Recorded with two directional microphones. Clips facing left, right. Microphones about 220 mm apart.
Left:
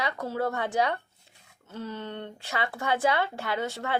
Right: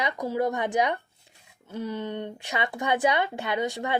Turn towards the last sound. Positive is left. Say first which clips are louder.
# right 2 dB
turn(degrees=-15)  # may be behind; listen again after turning